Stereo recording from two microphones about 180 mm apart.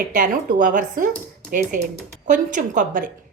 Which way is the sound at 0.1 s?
45° right (ahead or behind).